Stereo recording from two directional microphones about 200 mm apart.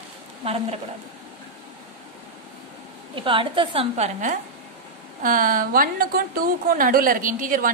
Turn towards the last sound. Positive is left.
turn(degrees=-45)  # may be behind; listen again after turning